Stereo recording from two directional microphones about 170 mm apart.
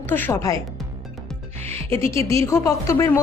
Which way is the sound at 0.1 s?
15° left (ahead or behind).